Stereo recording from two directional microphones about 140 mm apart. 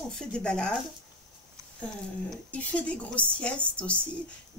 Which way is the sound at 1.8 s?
10° left (ahead or behind).